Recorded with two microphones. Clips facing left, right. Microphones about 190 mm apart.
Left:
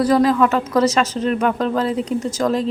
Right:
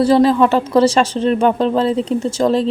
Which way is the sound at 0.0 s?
30° right (ahead or behind).